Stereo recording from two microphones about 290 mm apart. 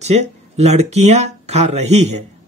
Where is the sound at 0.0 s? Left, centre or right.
Right.